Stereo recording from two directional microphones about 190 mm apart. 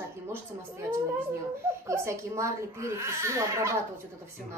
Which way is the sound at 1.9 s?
15° right (ahead or behind).